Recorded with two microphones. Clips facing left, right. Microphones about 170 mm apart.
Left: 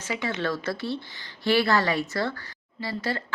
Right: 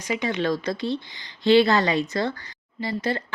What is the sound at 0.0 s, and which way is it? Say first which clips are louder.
A woman's voice: right 4 dB; 20° right (ahead or behind).